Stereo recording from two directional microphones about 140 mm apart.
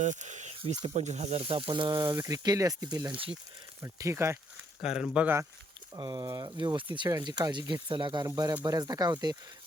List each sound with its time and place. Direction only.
0.0 s speech: 60° right (ahead or behind); by 4.4 s 20° right (ahead or behind)
4.8 s speech: 5° right (ahead or behind)
6.0 s speech: 30° right (ahead or behind)